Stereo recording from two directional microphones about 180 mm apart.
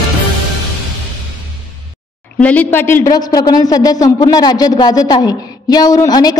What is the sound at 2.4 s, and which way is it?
Speech, 10° left (ahead or behind).